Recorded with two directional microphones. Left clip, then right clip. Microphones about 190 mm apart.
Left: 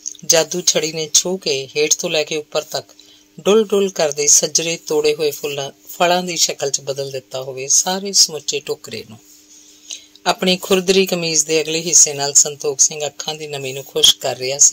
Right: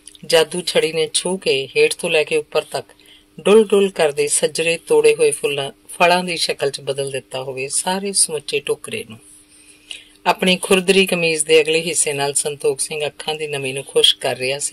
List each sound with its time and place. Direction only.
0.3 s speech: 45° left (ahead or behind)